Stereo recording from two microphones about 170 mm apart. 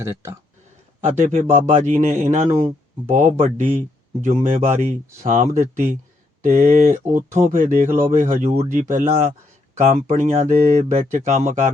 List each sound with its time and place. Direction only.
0.0 s speech: 15° right (ahead or behind)
1.0 s speech: 45° right (ahead or behind)